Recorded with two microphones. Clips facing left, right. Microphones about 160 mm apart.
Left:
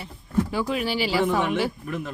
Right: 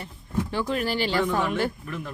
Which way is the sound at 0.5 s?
5° left (ahead or behind).